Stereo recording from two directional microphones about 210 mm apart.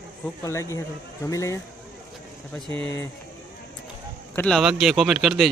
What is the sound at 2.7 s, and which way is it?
Speech, 10° left (ahead or behind).